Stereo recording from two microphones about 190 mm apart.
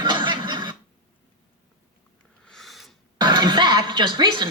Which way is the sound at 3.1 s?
20° right (ahead or behind).